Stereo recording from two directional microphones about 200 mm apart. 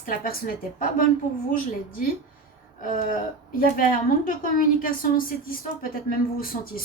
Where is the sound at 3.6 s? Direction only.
45° left (ahead or behind).